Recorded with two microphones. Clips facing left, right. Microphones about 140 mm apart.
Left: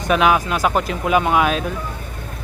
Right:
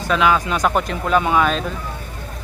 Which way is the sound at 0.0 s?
20° left (ahead or behind).